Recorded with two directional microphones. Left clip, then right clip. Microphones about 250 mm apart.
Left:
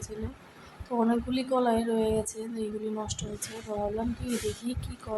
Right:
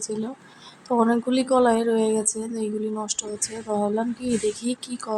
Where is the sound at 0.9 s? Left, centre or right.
Centre.